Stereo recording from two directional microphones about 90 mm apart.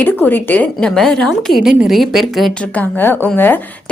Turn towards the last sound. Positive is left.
turn(degrees=20)  # may be behind; listen again after turning